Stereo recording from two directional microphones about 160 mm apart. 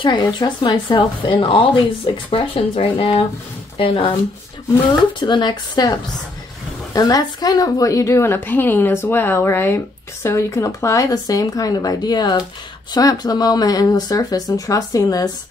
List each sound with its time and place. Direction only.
0.0 s speech: 25° left (ahead or behind)
5.2 s a woman's voice: 30° left (ahead or behind)